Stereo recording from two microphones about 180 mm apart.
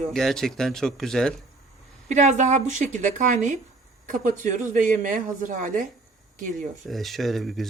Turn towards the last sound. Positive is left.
turn(degrees=0)  # may be behind; listen again after turning